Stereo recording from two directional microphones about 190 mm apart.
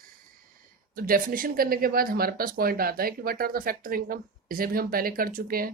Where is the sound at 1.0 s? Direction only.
50° right (ahead or behind).